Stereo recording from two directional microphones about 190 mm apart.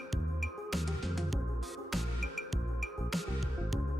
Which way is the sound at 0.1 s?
Centre (ahead or behind).